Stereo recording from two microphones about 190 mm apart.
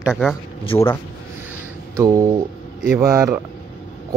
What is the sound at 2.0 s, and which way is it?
A man's voice, 15° right (ahead or behind).